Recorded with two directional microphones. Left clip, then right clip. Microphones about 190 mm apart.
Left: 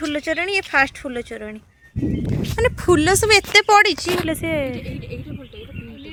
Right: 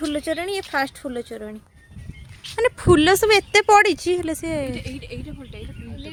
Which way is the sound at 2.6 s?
Centre (ahead or behind).